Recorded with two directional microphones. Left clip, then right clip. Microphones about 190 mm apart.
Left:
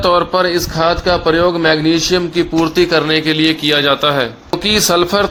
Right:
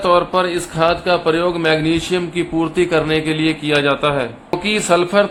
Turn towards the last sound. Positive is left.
turn(degrees=35)  # may be behind; listen again after turning